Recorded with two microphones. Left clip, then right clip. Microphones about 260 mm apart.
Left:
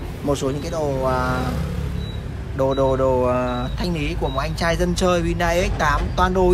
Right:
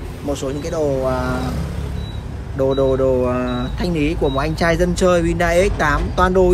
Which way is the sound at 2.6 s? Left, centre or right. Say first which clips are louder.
Right 2 dB; left.